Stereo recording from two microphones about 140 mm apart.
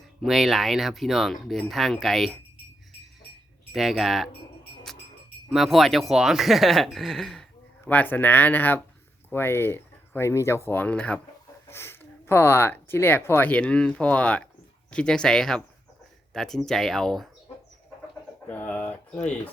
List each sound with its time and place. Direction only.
0.2 s speech: centre (ahead or behind)
3.7 s speech: centre (ahead or behind)
5.5 s speech: centre (ahead or behind)
7.9 s speech: 10° left (ahead or behind)
18.4 s speech: 10° left (ahead or behind)